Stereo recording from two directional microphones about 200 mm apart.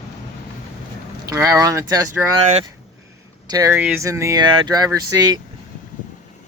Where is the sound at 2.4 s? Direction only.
35° right (ahead or behind).